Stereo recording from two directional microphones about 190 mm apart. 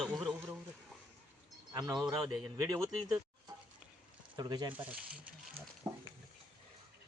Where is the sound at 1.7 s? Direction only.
20° right (ahead or behind).